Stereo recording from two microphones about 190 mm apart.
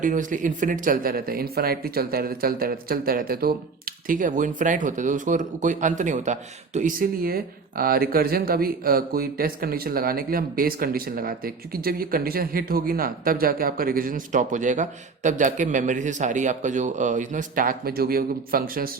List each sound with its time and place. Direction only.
0.0 s speech: 45° right (ahead or behind)